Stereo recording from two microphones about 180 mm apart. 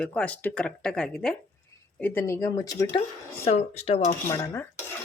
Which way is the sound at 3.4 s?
40° left (ahead or behind).